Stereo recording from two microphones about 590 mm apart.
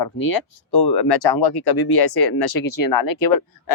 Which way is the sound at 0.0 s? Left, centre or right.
Left.